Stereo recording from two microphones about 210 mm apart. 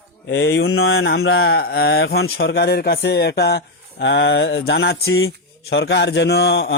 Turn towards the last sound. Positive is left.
turn(degrees=50)  # may be behind; listen again after turning